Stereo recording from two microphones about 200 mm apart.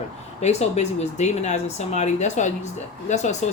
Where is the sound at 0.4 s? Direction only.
30° left (ahead or behind).